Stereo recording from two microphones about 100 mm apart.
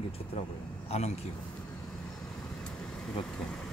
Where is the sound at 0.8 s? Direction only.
90° left.